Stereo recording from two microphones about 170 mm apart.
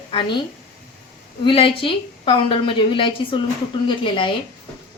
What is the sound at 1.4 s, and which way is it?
A woman's voice, 30° left (ahead or behind).